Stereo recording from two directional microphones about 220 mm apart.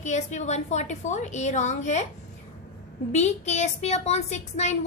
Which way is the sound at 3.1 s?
30° left (ahead or behind).